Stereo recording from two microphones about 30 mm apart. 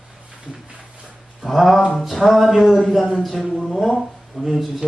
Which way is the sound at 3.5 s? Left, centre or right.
Centre.